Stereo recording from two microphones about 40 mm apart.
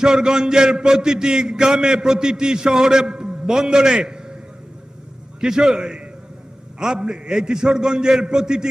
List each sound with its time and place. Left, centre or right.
0.0 s a man's voice: centre
5.4 s a man's voice: centre